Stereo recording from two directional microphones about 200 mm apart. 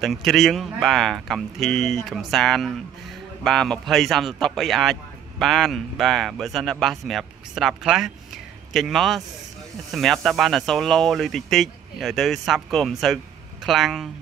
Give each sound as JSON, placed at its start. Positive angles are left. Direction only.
{"t": 0.0, "sound": "speech", "side_deg": 0}